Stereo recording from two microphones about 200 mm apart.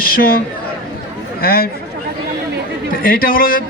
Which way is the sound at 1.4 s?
50° left (ahead or behind).